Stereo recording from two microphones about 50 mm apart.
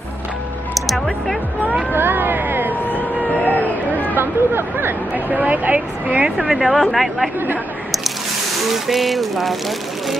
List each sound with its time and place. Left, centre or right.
0.7 s speech: centre
1.9 s a sound: right
2.9 s vehicle: left
4.2 s speech: right
5.1 s speech: right
6.2 s a woman's voice: centre
8.6 s a woman's voice: centre